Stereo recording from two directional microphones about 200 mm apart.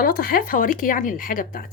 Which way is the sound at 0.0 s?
45° left (ahead or behind).